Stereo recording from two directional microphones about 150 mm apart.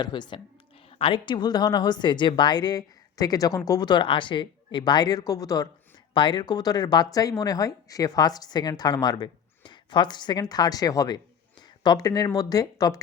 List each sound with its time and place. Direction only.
0.0 s a woman's voice: 30° left (ahead or behind)